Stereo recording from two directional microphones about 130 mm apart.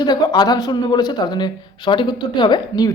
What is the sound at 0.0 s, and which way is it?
Speech, 30° left (ahead or behind).